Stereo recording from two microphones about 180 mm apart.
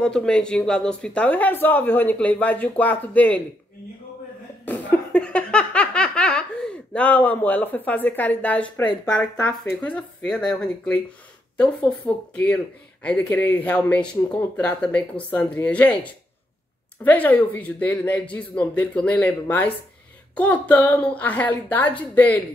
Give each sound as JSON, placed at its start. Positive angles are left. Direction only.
{"t": 0.0, "sound": "speech", "side_deg": 5}
{"t": 4.6, "sound": "giggle", "side_deg": 5}
{"t": 9.1, "sound": "speech", "side_deg": 10}